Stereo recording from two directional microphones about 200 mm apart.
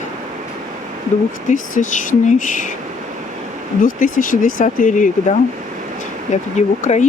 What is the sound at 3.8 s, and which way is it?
Speech, 45° left (ahead or behind).